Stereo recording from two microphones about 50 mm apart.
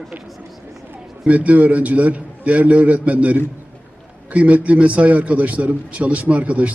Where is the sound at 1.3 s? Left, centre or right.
Right.